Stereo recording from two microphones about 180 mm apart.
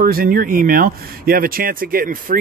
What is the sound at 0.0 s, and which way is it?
Speech, 55° right (ahead or behind).